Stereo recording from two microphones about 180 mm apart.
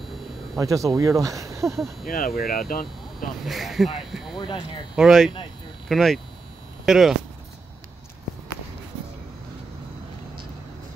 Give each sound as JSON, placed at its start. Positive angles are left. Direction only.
{"t": 0.6, "sound": "speech", "side_deg": -20}
{"t": 1.7, "sound": "speech", "side_deg": 0}
{"t": 2.0, "sound": "speech", "side_deg": 55}
{"t": 3.4, "sound": "speech", "side_deg": 0}
{"t": 4.4, "sound": "speech", "side_deg": 25}
{"t": 4.9, "sound": "speech", "side_deg": -5}